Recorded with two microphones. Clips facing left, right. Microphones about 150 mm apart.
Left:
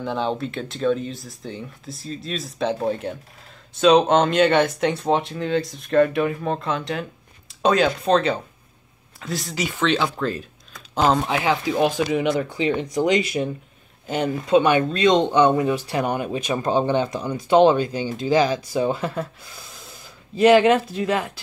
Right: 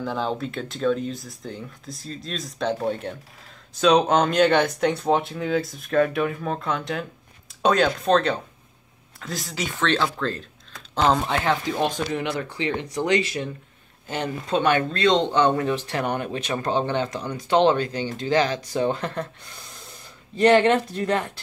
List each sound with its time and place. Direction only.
0.0 s speech: centre (ahead or behind)